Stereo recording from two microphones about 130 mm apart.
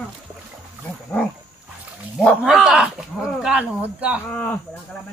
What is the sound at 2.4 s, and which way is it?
Speech, 5° right (ahead or behind).